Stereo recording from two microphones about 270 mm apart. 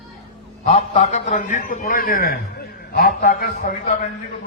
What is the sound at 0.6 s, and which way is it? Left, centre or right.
A man's voice, left.